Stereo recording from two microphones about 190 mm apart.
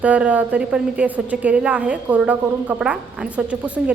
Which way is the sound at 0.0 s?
5° right (ahead or behind).